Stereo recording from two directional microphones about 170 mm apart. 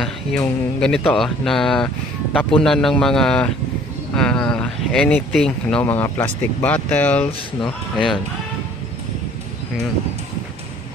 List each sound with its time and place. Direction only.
0.0 s speech: 5° left (ahead or behind)